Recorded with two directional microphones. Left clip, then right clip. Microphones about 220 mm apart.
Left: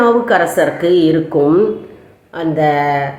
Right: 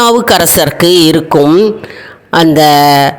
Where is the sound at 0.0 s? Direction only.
50° right (ahead or behind).